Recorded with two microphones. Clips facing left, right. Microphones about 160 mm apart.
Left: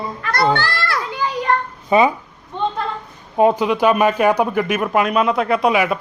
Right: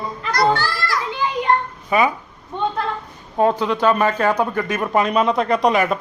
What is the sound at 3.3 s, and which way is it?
A man's voice, 15° left (ahead or behind).